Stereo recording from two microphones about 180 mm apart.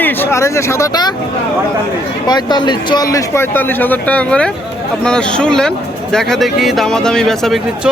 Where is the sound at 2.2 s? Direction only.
25° left (ahead or behind).